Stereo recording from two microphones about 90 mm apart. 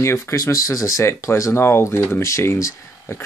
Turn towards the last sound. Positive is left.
turn(degrees=30)  # may be behind; listen again after turning